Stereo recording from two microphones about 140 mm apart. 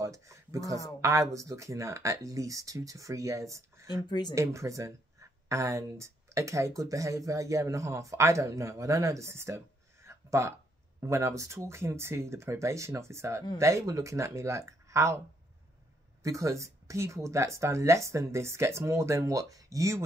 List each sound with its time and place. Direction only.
0.0 s a sound: 20° right (ahead or behind)
1.0 s speech: 20° right (ahead or behind)
4.1 s speech: 30° left (ahead or behind)
4.4 s speech: 20° right (ahead or behind)
10.0 s a sound: 20° right (ahead or behind)
11.0 s speech: 20° right (ahead or behind)
16.2 s speech: 20° right (ahead or behind)